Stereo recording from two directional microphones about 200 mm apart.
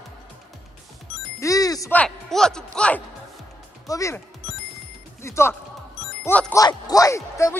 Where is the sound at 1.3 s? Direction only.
15° left (ahead or behind).